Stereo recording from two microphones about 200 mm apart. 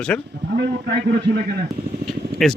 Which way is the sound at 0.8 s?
55° right (ahead or behind).